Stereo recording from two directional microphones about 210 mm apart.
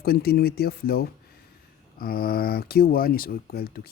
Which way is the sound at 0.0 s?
45° left (ahead or behind).